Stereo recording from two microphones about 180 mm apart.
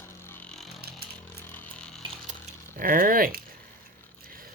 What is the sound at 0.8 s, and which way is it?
Chainsaw, 60° right (ahead or behind).